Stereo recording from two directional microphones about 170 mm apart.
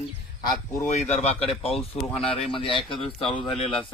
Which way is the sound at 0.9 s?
40° left (ahead or behind).